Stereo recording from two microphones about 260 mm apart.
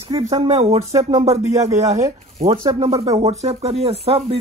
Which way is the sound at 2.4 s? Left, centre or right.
Centre.